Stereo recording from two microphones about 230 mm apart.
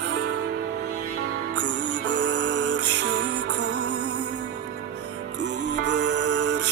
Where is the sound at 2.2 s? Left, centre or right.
Right.